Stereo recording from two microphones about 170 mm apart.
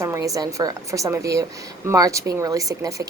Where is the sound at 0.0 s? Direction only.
15° right (ahead or behind).